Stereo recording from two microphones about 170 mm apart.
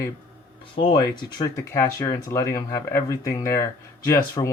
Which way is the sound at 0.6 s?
30° left (ahead or behind).